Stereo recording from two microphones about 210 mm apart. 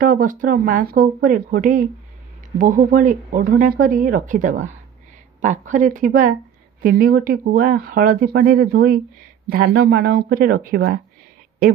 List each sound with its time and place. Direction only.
0.0 s speech: 40° right (ahead or behind)